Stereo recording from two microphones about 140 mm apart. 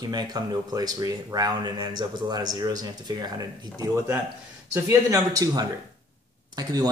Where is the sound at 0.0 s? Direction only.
30° right (ahead or behind).